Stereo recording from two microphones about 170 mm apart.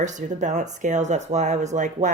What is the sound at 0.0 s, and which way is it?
Speech, 45° right (ahead or behind).